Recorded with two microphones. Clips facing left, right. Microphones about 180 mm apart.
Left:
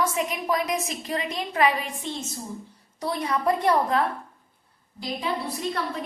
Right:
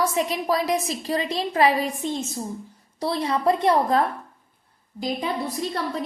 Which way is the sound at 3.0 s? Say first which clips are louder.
Right 3 dB; 30° right (ahead or behind).